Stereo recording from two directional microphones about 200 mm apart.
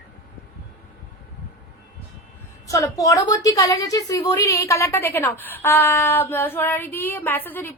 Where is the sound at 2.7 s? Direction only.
15° left (ahead or behind).